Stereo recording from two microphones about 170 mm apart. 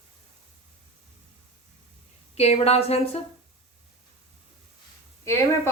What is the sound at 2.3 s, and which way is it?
Speech, 40° left (ahead or behind).